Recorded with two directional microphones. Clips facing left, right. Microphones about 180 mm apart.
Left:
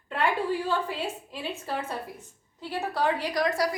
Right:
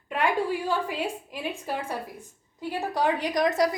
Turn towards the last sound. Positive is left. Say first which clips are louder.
# right 3 dB
turn(degrees=-20)  # may be behind; listen again after turning